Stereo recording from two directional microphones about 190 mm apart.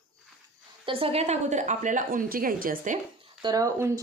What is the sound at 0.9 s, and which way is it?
A woman's voice, 30° right (ahead or behind).